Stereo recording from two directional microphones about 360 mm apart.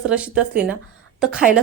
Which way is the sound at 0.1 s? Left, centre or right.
Centre.